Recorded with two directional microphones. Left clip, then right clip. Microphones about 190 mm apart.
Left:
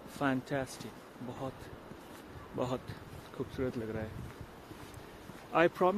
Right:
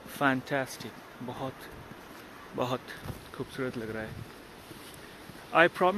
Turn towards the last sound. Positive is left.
turn(degrees=0)  # may be behind; listen again after turning